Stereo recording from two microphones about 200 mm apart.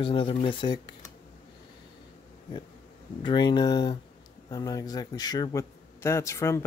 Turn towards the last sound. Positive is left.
turn(degrees=15)  # may be behind; listen again after turning